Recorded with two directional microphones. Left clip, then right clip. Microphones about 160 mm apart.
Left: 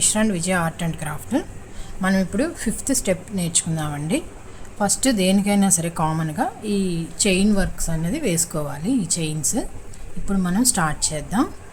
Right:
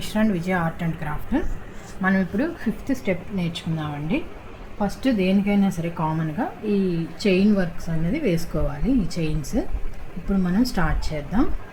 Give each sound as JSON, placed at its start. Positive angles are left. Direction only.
{"t": 0.0, "sound": "a woman's voice", "side_deg": 25}